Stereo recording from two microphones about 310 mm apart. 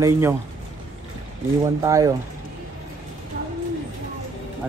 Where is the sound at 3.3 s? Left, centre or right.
Right.